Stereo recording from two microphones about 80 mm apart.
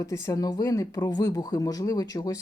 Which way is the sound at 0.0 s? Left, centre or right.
Left.